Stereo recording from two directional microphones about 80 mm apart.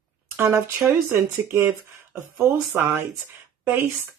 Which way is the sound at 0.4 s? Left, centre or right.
Right.